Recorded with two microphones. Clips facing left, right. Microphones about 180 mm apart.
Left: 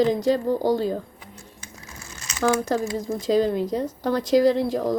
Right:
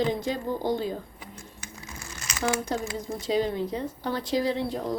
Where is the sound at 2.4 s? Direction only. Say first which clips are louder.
Left 6 dB; 45° left (ahead or behind).